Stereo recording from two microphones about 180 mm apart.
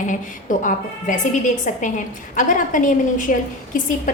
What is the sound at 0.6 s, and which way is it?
A woman's voice, 45° left (ahead or behind).